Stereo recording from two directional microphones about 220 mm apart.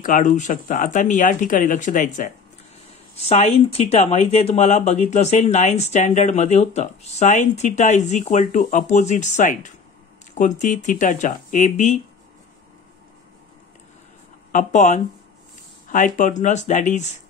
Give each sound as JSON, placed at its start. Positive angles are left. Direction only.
{"t": 0.0, "sound": "speech", "side_deg": 35}
{"t": 14.5, "sound": "speech", "side_deg": 35}